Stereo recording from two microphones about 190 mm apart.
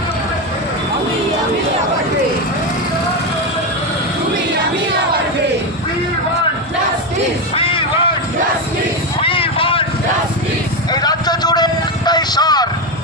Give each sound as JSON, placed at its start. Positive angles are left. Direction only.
{"t": 7.6, "sound": "a sound", "side_deg": 30}
{"t": 9.2, "sound": "vehicle", "side_deg": 30}
{"t": 10.9, "sound": "vehicle", "side_deg": 20}